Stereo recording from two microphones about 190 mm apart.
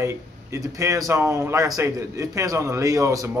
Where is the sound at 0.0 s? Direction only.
15° right (ahead or behind).